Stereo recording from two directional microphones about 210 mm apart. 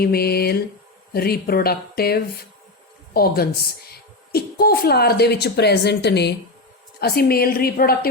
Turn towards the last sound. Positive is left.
turn(degrees=45)  # may be behind; listen again after turning